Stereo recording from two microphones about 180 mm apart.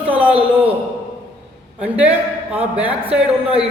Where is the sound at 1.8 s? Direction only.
10° right (ahead or behind).